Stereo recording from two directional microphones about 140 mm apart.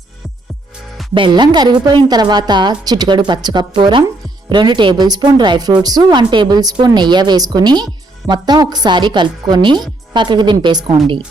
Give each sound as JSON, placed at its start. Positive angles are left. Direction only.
{"t": 1.1, "sound": "a woman's voice", "side_deg": -35}